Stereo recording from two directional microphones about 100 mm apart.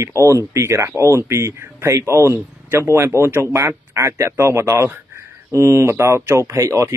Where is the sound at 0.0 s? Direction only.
30° right (ahead or behind).